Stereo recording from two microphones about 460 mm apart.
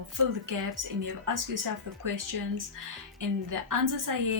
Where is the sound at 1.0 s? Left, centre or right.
Right.